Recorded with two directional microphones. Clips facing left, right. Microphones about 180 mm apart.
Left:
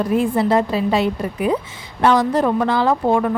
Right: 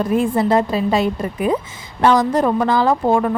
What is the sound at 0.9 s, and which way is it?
A woman's voice, 45° right (ahead or behind).